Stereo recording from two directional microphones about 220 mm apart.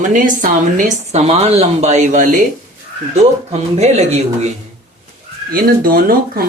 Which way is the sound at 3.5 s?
30° right (ahead or behind).